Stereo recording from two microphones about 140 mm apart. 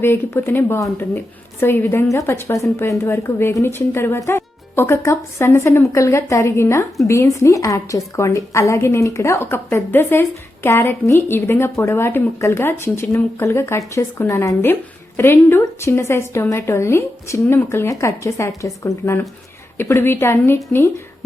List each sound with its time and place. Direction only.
0.0 s a woman's voice: 15° left (ahead or behind)